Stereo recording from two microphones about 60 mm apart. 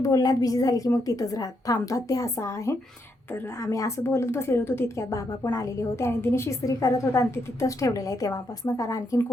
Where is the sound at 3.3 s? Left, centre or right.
Left.